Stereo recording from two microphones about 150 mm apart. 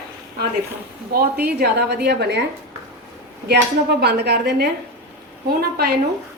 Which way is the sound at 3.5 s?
90° right.